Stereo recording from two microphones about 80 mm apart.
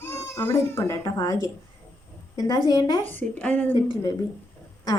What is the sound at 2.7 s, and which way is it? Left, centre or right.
Speech, left.